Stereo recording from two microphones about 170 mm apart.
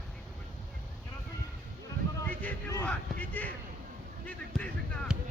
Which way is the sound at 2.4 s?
10° left (ahead or behind).